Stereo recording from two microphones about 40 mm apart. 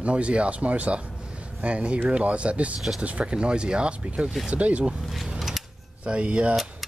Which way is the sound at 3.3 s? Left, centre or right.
Right.